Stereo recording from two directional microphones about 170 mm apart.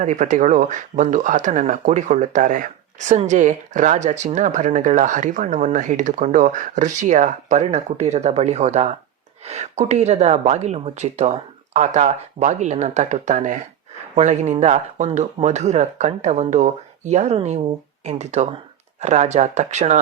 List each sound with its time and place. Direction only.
0.0 s speech: 45° right (ahead or behind)